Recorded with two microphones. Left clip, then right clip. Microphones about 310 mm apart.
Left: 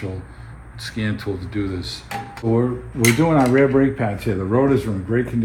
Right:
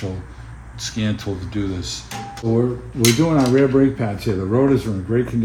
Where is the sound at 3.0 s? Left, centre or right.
Centre.